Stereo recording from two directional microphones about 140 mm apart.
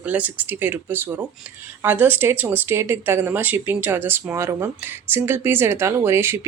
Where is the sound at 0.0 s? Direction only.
10° right (ahead or behind).